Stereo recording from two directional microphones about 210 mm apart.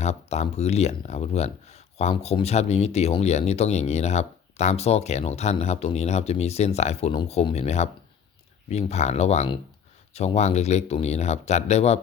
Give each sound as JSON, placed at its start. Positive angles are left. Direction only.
{"t": 0.0, "sound": "speech", "side_deg": 30}